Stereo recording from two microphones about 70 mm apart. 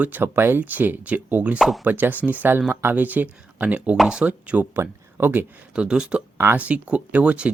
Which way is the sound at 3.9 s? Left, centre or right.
Centre.